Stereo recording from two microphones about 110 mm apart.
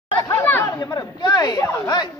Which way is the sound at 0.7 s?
35° left (ahead or behind).